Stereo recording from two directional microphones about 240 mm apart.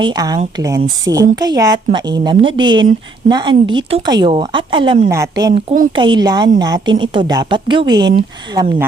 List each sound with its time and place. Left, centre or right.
0.0 s speech: centre